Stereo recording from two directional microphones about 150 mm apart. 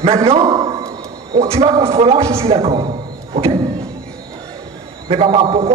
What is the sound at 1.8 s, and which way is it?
A man's voice, 40° right (ahead or behind).